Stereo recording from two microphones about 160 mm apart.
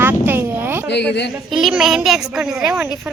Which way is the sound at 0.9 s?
90° left.